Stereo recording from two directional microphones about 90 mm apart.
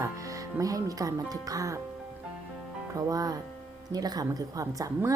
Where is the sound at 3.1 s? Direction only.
45° right (ahead or behind).